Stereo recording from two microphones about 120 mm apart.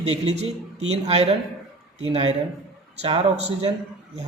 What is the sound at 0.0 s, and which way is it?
Speech, 65° right (ahead or behind).